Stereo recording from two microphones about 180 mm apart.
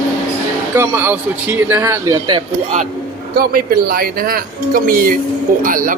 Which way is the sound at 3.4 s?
55° right (ahead or behind).